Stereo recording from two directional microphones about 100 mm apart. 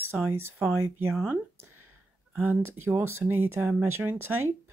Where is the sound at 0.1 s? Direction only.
25° right (ahead or behind).